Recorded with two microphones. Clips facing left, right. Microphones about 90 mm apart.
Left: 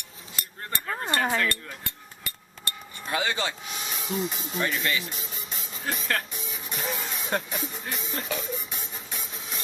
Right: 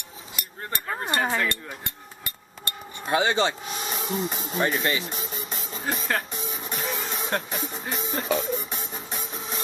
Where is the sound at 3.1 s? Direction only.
30° right (ahead or behind).